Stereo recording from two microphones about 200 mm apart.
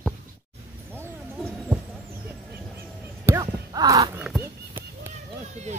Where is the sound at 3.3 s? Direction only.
15° right (ahead or behind).